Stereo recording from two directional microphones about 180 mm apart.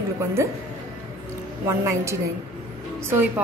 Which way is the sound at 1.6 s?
15° right (ahead or behind).